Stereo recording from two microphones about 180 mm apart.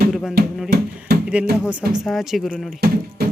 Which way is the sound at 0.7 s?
60° right (ahead or behind).